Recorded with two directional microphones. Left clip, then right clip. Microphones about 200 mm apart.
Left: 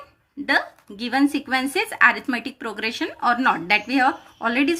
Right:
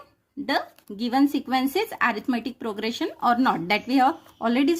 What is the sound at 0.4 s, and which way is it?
Speech, 50° right (ahead or behind).